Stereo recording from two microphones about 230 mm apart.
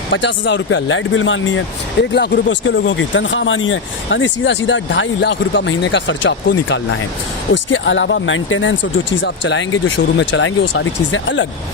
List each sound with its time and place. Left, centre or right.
0.1 s speech: left